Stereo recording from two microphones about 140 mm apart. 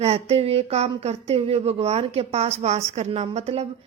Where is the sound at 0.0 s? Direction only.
50° right (ahead or behind).